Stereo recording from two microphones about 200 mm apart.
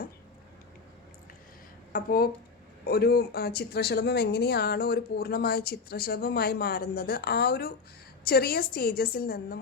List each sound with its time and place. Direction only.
1.9 s speech: 45° left (ahead or behind)